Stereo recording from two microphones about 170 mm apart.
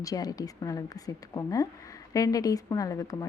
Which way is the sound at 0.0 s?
20° left (ahead or behind).